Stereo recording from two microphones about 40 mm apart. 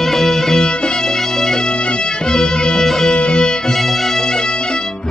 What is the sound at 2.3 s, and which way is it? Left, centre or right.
Music, centre.